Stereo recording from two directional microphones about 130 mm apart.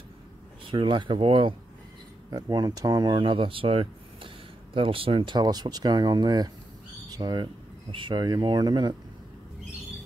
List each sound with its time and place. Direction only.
0.7 s speech: 40° right (ahead or behind)
2.3 s speech: 30° right (ahead or behind)